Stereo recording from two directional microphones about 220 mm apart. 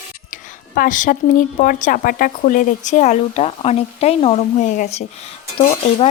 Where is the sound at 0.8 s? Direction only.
35° left (ahead or behind).